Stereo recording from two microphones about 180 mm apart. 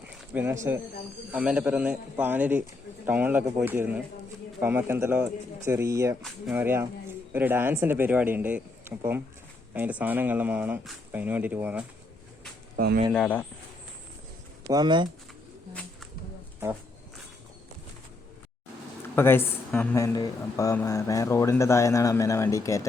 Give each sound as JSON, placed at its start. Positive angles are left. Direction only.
{"t": 0.3, "sound": "speech", "side_deg": -15}
{"t": 12.7, "sound": "speech", "side_deg": -55}
{"t": 13.1, "sound": "speech", "side_deg": 10}
{"t": 14.7, "sound": "speech", "side_deg": -25}
{"t": 19.1, "sound": "speech", "side_deg": 10}